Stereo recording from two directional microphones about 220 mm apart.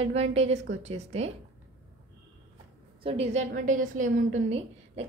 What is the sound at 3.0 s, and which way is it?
A woman's voice, 25° right (ahead or behind).